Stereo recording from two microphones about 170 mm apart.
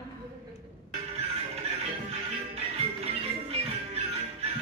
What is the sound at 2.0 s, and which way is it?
Music, 35° right (ahead or behind).